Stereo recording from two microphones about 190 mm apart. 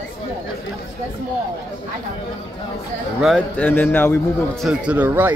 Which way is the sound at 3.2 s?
Centre (ahead or behind).